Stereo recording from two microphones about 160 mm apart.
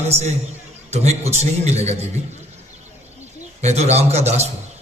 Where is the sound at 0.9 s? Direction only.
45° right (ahead or behind).